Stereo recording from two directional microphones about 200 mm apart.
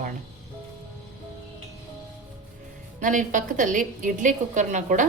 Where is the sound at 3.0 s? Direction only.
40° right (ahead or behind).